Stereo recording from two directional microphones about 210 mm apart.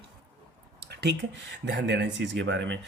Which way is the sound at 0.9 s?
50° right (ahead or behind).